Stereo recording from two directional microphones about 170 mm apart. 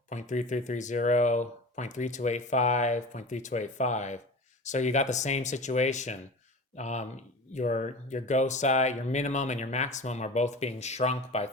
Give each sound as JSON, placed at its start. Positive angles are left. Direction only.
{"t": 0.1, "sound": "speech", "side_deg": 45}